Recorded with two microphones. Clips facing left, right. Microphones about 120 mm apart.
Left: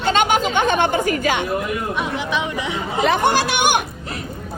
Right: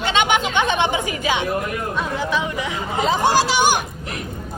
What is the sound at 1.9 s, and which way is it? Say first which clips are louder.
Speech: even; 15° left (ahead or behind).